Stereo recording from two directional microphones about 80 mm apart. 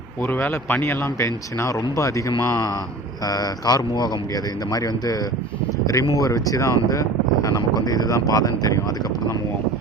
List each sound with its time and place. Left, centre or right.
0.2 s speech: left
3.2 s speech: left